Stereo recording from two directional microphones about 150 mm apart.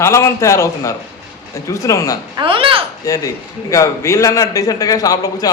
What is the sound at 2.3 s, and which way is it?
Speech, 35° right (ahead or behind).